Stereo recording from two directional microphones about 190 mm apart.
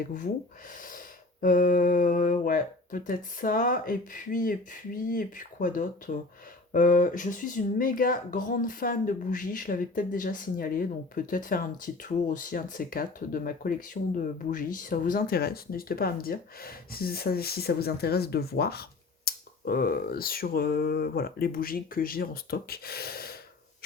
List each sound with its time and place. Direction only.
0.0 s speech: 45° left (ahead or behind)